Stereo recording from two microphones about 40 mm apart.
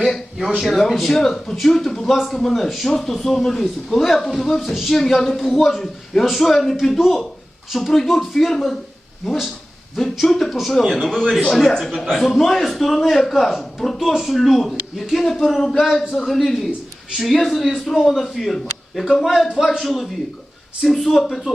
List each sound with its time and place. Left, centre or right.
0.6 s a man's voice: centre
2.5 s a man's voice: centre
4.9 s a man's voice: centre
6.7 s a man's voice: centre